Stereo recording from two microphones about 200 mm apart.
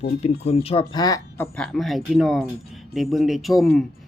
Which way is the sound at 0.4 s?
30° left (ahead or behind).